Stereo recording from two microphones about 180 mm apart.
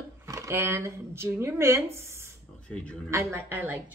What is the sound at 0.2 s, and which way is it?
Speech, 15° right (ahead or behind).